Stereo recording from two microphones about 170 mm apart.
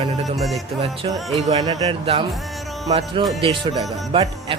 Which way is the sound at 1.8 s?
30° right (ahead or behind).